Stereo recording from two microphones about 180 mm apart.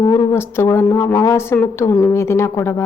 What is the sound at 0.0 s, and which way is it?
A woman's voice, 25° left (ahead or behind).